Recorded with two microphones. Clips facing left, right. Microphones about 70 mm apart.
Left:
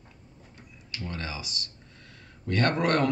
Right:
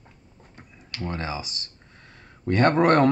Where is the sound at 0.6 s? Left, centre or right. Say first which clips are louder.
Right 5 dB; right.